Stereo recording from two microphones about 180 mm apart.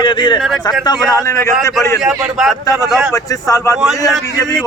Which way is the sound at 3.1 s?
15° left (ahead or behind).